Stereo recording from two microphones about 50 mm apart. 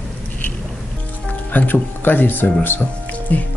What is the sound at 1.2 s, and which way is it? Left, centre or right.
Speech, left.